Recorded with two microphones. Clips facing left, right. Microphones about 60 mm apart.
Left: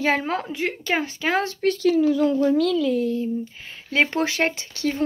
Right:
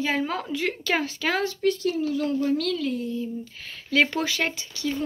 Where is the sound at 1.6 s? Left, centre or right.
Left.